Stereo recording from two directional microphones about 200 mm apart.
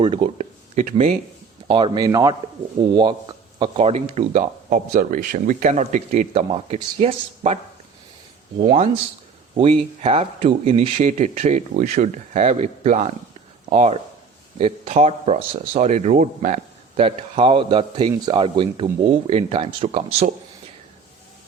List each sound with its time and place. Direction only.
0.0 s a man's voice: 25° right (ahead or behind)